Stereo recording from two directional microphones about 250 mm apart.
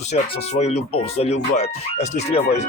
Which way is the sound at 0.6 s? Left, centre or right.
Left.